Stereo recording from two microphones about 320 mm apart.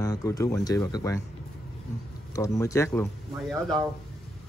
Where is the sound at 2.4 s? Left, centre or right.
Centre.